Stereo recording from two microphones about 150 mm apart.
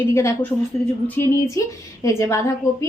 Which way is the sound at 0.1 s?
20° left (ahead or behind).